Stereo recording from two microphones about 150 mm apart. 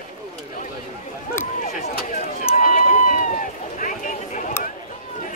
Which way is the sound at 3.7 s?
60° left (ahead or behind).